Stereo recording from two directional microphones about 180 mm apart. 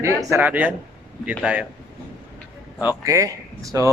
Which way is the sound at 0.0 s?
15° right (ahead or behind).